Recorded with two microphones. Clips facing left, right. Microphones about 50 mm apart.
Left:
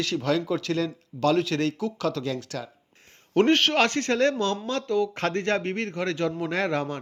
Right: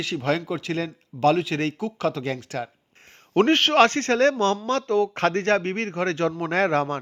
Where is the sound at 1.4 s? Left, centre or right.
Centre.